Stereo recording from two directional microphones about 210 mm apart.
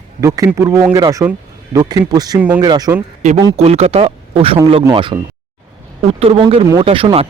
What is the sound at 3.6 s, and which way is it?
Speech, 30° right (ahead or behind).